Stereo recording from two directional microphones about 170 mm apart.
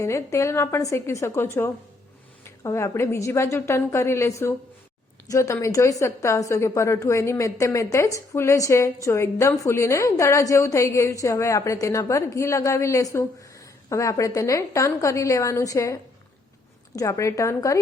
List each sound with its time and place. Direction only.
0.0 s a woman's voice: 15° left (ahead or behind)